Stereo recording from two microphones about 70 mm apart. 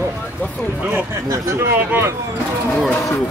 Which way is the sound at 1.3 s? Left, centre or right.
Right.